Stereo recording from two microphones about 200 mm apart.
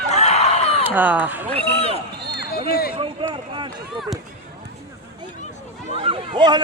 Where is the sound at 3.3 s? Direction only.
25° right (ahead or behind).